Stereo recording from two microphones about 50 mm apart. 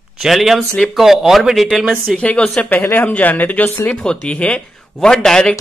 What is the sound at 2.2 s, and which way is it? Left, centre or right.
Speech, left.